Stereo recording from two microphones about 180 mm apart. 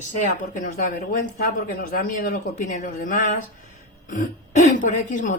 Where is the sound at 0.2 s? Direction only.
50° left (ahead or behind).